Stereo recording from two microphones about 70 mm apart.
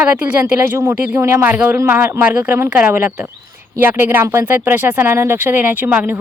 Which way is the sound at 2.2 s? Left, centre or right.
Centre.